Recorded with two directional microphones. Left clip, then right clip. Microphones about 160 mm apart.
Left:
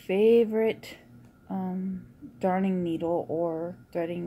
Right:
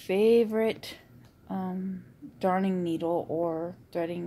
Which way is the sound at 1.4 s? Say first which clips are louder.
Left 1 dB; 5° left (ahead or behind).